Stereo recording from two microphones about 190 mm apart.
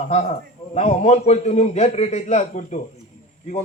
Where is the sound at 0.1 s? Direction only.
35° left (ahead or behind).